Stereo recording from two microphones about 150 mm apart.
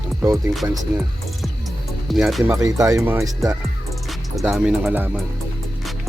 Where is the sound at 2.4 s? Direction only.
20° right (ahead or behind).